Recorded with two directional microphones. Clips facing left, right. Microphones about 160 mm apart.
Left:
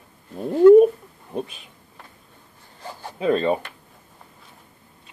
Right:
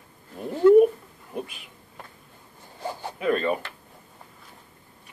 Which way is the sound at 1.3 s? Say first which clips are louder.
Left 4 dB; 25° left (ahead or behind).